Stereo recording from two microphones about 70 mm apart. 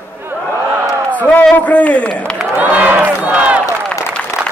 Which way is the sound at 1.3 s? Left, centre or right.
Left.